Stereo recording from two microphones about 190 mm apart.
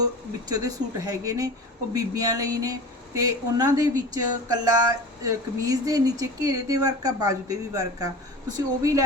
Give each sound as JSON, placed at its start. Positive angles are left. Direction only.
{"t": 0.0, "sound": "speech", "side_deg": -20}